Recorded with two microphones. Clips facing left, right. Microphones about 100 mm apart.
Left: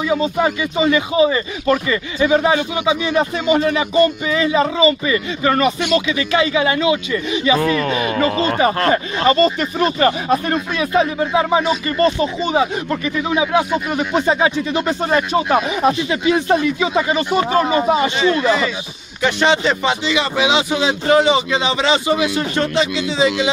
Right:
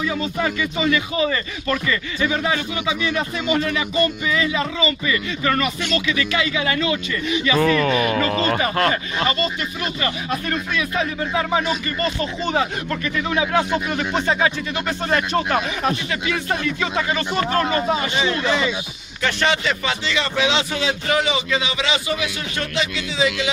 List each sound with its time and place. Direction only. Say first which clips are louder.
0.0 s speech: left 6 dB; 20° left (ahead or behind)
8.8 s speech: left 5 dB; 30° left (ahead or behind)
19.2 s speech: left 5 dB; 25° left (ahead or behind)
21.1 s speech: left 8 dB; 30° left (ahead or behind)